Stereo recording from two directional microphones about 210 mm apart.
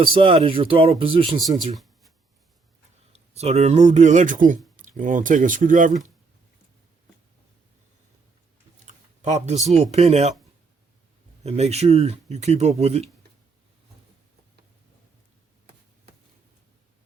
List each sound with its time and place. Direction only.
0.0 s speech: 25° right (ahead or behind)
1.4 s speech: centre (ahead or behind)
3.1 s speech: 30° right (ahead or behind)
9.2 s speech: 35° right (ahead or behind)
11.4 s speech: 30° right (ahead or behind)